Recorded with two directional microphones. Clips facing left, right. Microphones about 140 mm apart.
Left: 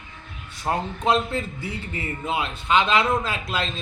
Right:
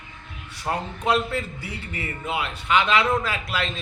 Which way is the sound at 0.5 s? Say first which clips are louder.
Left 2 dB; 25° left (ahead or behind).